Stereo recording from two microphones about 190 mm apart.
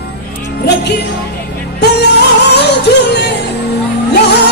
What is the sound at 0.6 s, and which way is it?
Music, 60° left (ahead or behind).